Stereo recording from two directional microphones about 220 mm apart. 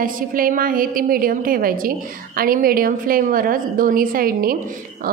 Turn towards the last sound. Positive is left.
turn(degrees=-40)  # may be behind; listen again after turning